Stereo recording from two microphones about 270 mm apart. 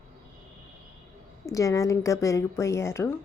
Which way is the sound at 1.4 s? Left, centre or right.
Centre.